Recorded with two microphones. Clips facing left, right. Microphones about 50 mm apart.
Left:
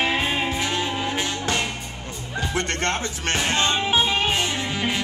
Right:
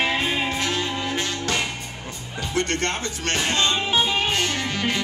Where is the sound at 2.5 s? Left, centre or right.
Centre.